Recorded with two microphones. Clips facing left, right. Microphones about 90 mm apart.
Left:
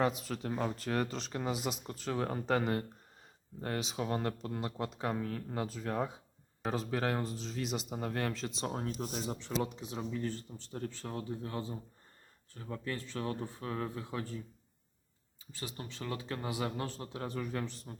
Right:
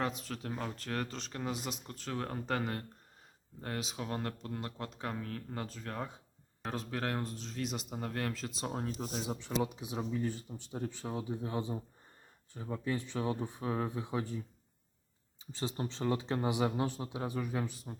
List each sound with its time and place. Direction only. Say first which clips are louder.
0.0 s speech: left 4 dB; 5° left (ahead or behind); by 14.4 s 20° right (ahead or behind)
15.5 s speech: right 6 dB; 25° right (ahead or behind); by 17.9 s 10° right (ahead or behind)